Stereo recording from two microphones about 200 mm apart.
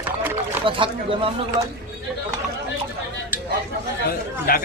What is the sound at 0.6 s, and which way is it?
Speech, 25° right (ahead or behind).